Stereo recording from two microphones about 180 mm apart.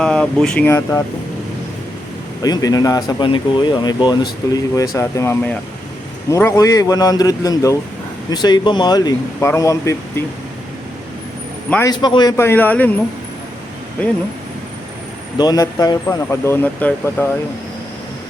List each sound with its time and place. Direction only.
0.0 s speech: 5° left (ahead or behind)
0.7 s speech: 15° left (ahead or behind)
2.4 s speech: 20° left (ahead or behind)
11.9 s speech: 25° left (ahead or behind)
15.4 s speech: 20° left (ahead or behind)